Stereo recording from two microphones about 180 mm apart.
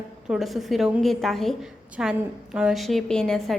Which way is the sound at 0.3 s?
Centre (ahead or behind).